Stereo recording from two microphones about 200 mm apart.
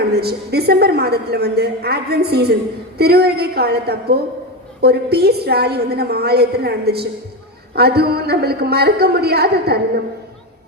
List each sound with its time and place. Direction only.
0.1 s a woman's voice: 55° right (ahead or behind)